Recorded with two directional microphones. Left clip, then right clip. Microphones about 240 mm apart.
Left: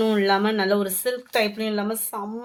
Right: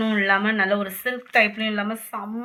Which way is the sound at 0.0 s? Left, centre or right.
Left.